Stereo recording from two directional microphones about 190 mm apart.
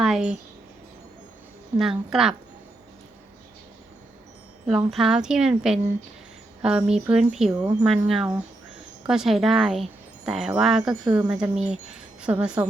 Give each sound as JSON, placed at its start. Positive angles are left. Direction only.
{"t": 0.0, "sound": "speech", "side_deg": -5}
{"t": 1.8, "sound": "speech", "side_deg": 0}
{"t": 4.9, "sound": "speech", "side_deg": 0}
{"t": 7.5, "sound": "speech", "side_deg": -20}
{"t": 7.9, "sound": "speech", "side_deg": 0}